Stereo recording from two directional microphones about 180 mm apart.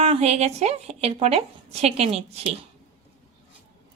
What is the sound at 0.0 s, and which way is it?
A woman's voice, 35° right (ahead or behind).